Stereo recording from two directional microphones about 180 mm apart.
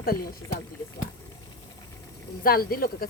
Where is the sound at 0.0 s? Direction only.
55° left (ahead or behind).